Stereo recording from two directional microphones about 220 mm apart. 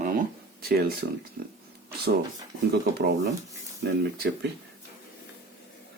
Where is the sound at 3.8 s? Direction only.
45° right (ahead or behind).